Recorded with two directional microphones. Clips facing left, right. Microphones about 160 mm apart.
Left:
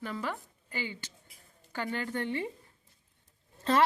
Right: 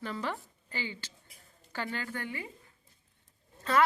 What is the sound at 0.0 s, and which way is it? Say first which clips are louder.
A woman's voice: even; 5° left (ahead or behind).